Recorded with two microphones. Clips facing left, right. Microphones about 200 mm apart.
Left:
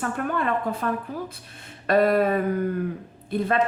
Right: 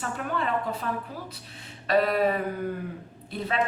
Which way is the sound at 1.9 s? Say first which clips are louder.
Left 4 dB; 50° left (ahead or behind).